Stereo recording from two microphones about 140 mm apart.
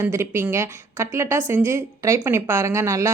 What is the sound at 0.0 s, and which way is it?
A woman's voice, 20° right (ahead or behind).